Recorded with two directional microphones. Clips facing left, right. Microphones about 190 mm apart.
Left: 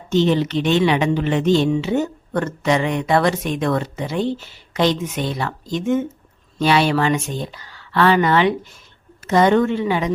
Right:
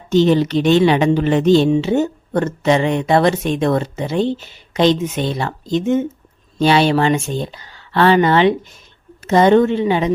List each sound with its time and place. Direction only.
0.1 s speech: 40° right (ahead or behind)